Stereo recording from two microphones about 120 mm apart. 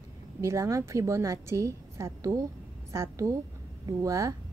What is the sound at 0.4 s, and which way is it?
Speech, 25° right (ahead or behind).